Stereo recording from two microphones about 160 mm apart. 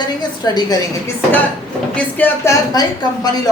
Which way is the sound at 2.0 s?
10° left (ahead or behind).